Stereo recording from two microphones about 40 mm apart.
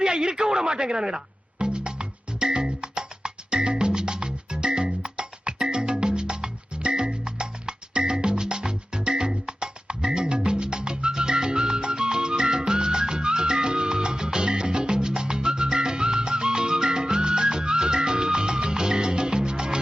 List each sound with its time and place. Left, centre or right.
0.0 s music: centre